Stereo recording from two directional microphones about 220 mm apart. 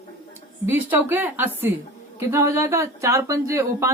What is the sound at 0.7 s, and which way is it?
A woman's voice, 10° right (ahead or behind).